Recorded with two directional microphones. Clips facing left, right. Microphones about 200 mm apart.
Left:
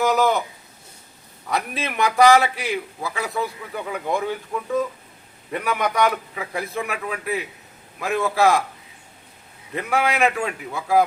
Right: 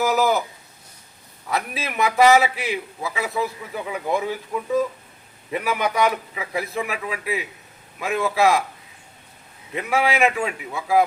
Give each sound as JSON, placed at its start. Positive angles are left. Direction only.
{"t": 0.0, "sound": "a man's voice", "side_deg": -5}
{"t": 1.5, "sound": "a man's voice", "side_deg": 0}
{"t": 9.7, "sound": "a man's voice", "side_deg": 0}